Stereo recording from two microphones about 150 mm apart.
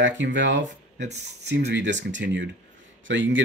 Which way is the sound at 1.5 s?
90° right.